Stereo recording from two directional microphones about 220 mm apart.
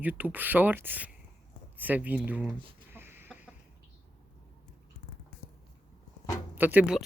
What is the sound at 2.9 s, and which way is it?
Chicken, 10° right (ahead or behind).